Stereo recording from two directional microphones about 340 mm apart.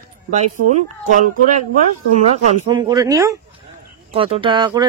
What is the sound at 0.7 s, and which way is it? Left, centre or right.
Speech, right.